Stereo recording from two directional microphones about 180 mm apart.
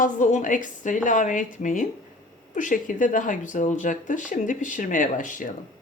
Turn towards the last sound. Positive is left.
turn(degrees=45)  # may be behind; listen again after turning